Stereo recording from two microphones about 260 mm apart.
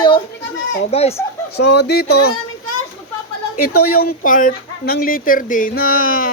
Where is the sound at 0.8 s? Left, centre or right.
Left.